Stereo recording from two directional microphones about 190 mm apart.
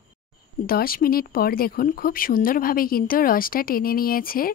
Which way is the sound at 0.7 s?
50° left (ahead or behind).